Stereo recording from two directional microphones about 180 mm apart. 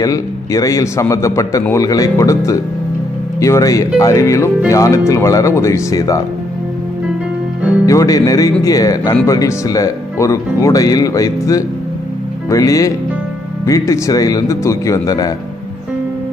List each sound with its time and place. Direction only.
0.0 s speech: 20° left (ahead or behind)
7.8 s speech: 20° left (ahead or behind)